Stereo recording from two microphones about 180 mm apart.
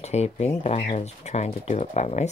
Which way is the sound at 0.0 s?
35° left (ahead or behind).